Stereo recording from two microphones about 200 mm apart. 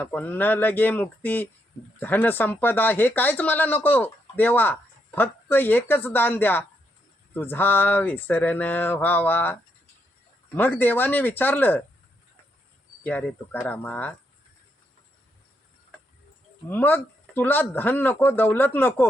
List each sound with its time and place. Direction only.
0.0 s speech: 10° left (ahead or behind)
13.0 s speech: 5° left (ahead or behind)
16.6 s speech: 10° left (ahead or behind)